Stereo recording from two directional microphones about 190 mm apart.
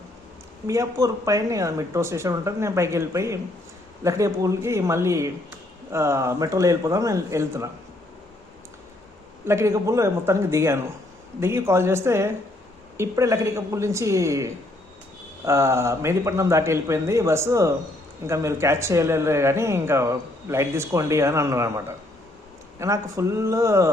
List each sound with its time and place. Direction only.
0.7 s speech: 15° right (ahead or behind)
9.5 s speech: 15° right (ahead or behind)